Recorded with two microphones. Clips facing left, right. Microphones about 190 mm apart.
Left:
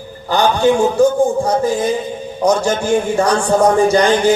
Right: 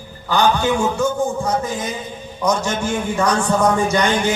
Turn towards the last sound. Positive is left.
turn(degrees=35)  # may be behind; listen again after turning